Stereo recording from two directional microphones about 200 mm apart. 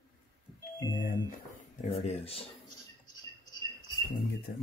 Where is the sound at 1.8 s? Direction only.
30° left (ahead or behind).